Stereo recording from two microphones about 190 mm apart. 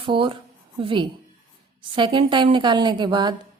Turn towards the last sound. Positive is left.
turn(degrees=-25)  # may be behind; listen again after turning